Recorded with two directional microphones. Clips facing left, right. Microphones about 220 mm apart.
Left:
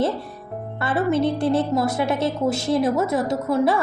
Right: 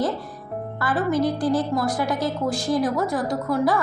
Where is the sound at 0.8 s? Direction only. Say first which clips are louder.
Left 2 dB; 25° left (ahead or behind).